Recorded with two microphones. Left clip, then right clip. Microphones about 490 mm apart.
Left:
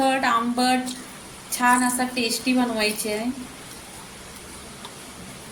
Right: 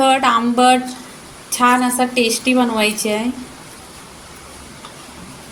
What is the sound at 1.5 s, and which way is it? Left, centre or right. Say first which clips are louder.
A woman's voice: right 6 dB; left.